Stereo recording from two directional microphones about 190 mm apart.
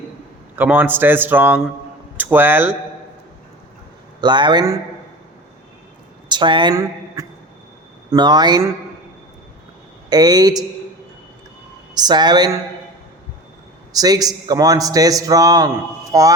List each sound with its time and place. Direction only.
0.5 s a man's voice: 10° right (ahead or behind)
4.2 s a man's voice: 25° right (ahead or behind)
6.2 s a woman's voice: 25° right (ahead or behind)
10.1 s a man's voice: 20° right (ahead or behind)
11.9 s a man's voice: 20° right (ahead or behind)
13.9 s a man's voice: 20° right (ahead or behind)